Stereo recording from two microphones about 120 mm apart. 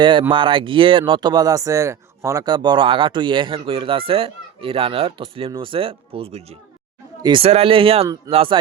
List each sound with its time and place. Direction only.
0.0 s speech: 45° right (ahead or behind)
7.2 s speech: 40° right (ahead or behind)
7.4 s speech: 55° right (ahead or behind)